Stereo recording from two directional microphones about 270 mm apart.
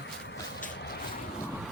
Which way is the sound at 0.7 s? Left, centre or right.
Left.